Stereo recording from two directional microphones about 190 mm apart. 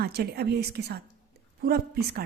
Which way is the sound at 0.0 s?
55° right (ahead or behind).